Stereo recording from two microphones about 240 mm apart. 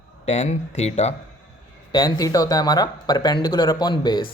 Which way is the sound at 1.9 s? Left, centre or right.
Centre.